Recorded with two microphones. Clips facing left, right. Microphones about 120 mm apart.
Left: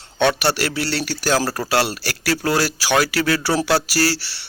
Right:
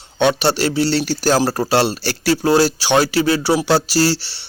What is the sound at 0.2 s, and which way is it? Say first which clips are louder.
Speech: right 3 dB; 20° right (ahead or behind).